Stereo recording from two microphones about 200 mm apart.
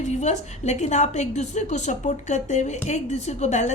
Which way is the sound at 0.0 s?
35° left (ahead or behind).